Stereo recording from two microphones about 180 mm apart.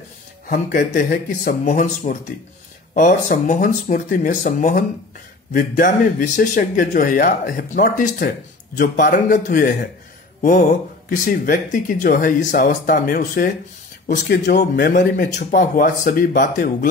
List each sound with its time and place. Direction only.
0.5 s speech: 45° left (ahead or behind)